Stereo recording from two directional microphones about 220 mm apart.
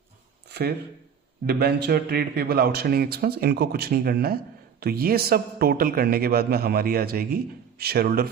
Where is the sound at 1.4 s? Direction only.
45° right (ahead or behind).